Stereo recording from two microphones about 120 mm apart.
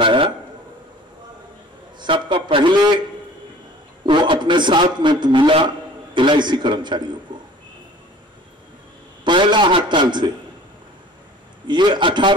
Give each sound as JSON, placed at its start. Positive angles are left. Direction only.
{"t": 0.0, "sound": "a sound", "side_deg": -45}
{"t": 2.0, "sound": "a man's voice", "side_deg": -40}
{"t": 4.0, "sound": "a man's voice", "side_deg": -40}
{"t": 7.3, "sound": "a sound", "side_deg": -40}
{"t": 9.2, "sound": "a man's voice", "side_deg": -40}
{"t": 11.6, "sound": "a man's voice", "side_deg": -40}